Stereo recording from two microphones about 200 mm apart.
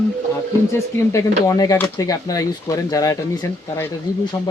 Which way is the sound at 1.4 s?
15° left (ahead or behind).